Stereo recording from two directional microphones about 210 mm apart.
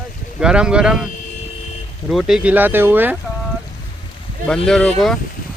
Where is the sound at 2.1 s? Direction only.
Centre (ahead or behind).